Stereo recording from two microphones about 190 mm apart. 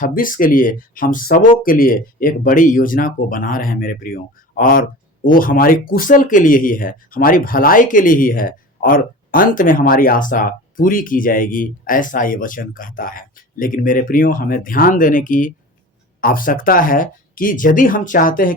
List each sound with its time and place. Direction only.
0.0 s speech: 45° left (ahead or behind)